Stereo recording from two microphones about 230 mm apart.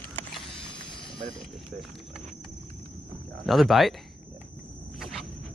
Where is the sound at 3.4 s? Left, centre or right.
Centre.